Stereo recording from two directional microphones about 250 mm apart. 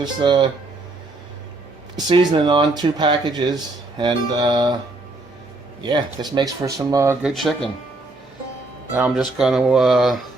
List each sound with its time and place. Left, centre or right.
0.0 s speech: centre
2.0 s speech: centre
5.8 s speech: centre
8.9 s speech: centre